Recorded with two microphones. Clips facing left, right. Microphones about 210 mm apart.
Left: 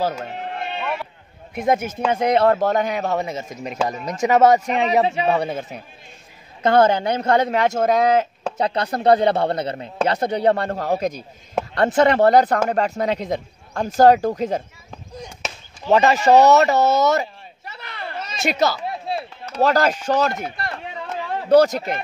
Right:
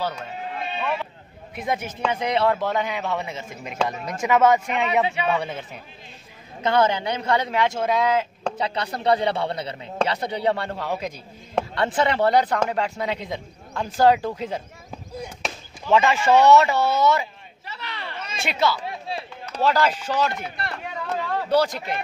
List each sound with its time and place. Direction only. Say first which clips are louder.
0.0 s a sound: left 5 dB; 50° left (ahead or behind)
1.5 s speech: left 7 dB; 45° left (ahead or behind)
15.1 s chop: right 1 dB; 5° right (ahead or behind)
15.9 s speech: left 4 dB; 40° left (ahead or behind)
17.7 s a sound: left 3 dB; 45° left (ahead or behind)
19.6 s speech: left 3 dB; 45° left (ahead or behind)